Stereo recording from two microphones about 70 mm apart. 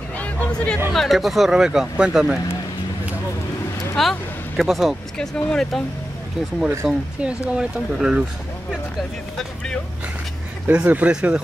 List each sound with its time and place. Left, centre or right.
0.2 s hubbub: centre
0.9 s speech: centre
3.9 s speech: centre
5.1 s speech: centre
6.9 s speech: centre
10.7 s speech: right